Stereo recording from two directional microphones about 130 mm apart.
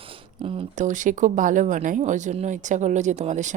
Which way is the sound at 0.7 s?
75° right (ahead or behind).